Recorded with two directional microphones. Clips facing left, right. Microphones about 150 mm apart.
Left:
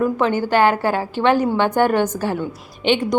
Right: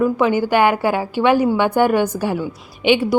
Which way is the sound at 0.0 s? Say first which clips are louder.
Right 2 dB; 10° right (ahead or behind).